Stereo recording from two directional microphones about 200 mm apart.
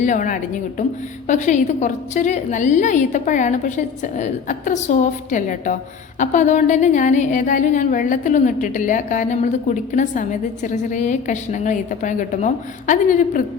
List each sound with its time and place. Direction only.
0.0 s a woman's voice: 40° left (ahead or behind)